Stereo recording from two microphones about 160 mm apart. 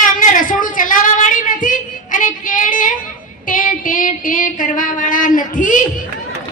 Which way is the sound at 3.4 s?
55° left (ahead or behind).